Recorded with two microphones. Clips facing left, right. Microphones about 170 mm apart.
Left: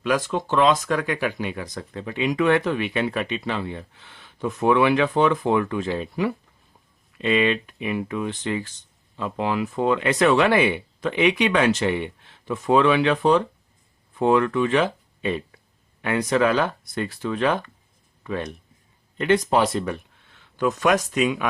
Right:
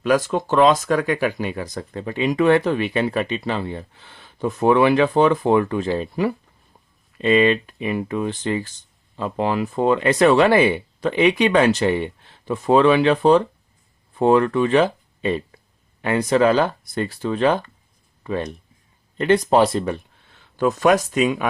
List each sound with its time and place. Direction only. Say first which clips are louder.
0.0 s speech: right 4 dB; 40° right (ahead or behind)